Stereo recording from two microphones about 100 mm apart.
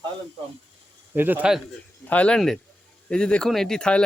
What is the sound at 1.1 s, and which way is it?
Speech, 20° right (ahead or behind).